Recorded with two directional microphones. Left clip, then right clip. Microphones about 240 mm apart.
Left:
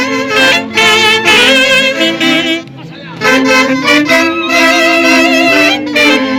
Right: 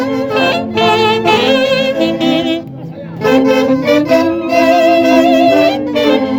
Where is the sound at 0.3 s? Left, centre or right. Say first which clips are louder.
Left 6 dB; centre.